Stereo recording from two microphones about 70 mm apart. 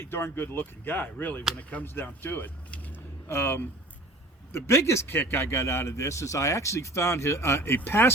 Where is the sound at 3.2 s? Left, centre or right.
Left.